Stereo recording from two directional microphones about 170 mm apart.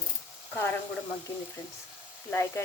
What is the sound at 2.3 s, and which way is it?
Speech, 15° left (ahead or behind).